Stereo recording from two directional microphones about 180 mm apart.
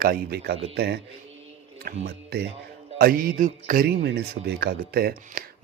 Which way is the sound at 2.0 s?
60° right (ahead or behind).